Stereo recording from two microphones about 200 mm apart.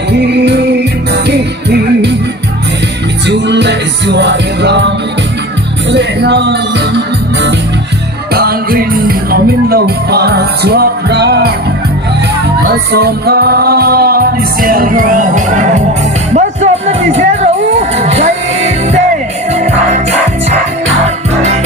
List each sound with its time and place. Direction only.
0.1 s music: 60° right (ahead or behind)
3.2 s music: 60° right (ahead or behind)
5.9 s music: 60° right (ahead or behind)
8.3 s music: 50° right (ahead or behind)
12.6 s music: 55° right (ahead or behind); by 20.6 s 35° right (ahead or behind)